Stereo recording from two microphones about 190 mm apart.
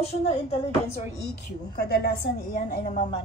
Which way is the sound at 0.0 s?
30° left (ahead or behind).